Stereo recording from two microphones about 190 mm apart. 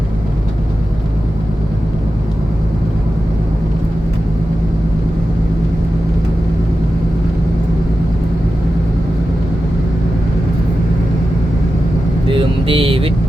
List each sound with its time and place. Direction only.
12.3 s vehicle: 25° right (ahead or behind)